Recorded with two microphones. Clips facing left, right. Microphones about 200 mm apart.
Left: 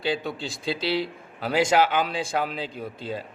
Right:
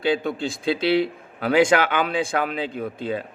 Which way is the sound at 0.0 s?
50° right (ahead or behind).